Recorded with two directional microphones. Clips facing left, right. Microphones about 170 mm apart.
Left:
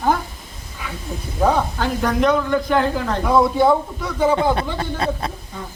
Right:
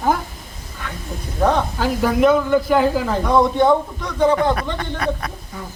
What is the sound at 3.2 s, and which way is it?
Speech, 5° left (ahead or behind).